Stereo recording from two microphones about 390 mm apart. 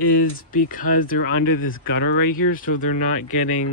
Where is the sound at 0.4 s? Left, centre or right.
Left.